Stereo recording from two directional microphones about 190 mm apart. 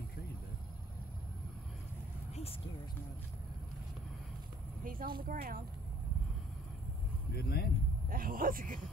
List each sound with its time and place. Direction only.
4.8 s speech: 50° right (ahead or behind)
7.3 s speech: 55° left (ahead or behind)
8.1 s speech: 50° right (ahead or behind)